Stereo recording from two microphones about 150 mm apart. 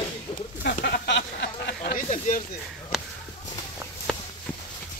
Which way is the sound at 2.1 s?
55° left (ahead or behind).